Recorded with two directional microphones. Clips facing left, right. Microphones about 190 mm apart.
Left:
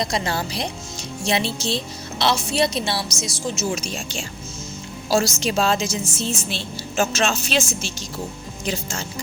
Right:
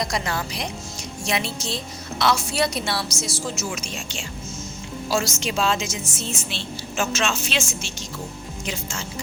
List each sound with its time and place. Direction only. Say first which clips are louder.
0.0 s a woman's voice: left 2 dB; 30° left (ahead or behind)
3.8 s a woman's voice: left 3 dB; 35° left (ahead or behind)